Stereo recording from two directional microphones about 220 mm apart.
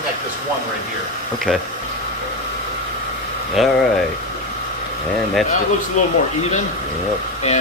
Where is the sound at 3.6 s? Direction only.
Centre (ahead or behind).